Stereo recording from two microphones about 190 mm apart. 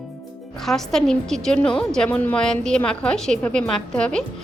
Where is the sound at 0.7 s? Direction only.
Centre (ahead or behind).